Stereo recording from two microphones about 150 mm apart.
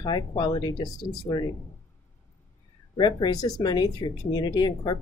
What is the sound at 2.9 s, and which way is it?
Speech, 30° left (ahead or behind).